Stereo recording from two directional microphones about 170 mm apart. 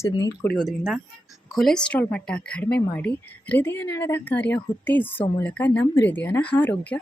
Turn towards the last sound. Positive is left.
turn(degrees=10)  # may be behind; listen again after turning